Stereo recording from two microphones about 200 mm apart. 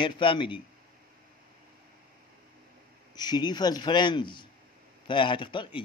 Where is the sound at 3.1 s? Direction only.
20° left (ahead or behind).